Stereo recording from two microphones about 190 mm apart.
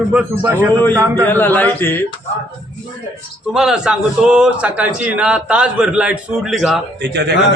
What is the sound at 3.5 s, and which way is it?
A man's voice, 5° right (ahead or behind).